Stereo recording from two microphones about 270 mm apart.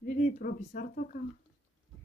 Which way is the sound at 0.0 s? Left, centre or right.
Left.